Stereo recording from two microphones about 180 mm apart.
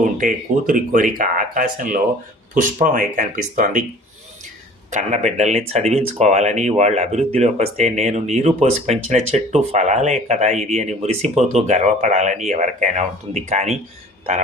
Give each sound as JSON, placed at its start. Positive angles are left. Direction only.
{"t": 0.2, "sound": "speech", "side_deg": -50}
{"t": 4.9, "sound": "speech", "side_deg": -40}